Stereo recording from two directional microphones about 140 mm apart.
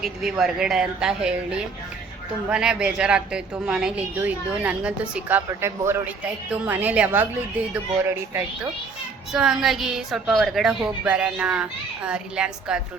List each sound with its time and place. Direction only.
0.0 s a woman's voice: 5° right (ahead or behind)
5.5 s a man's voice: 20° right (ahead or behind)
9.3 s a woman's voice: 5° right (ahead or behind)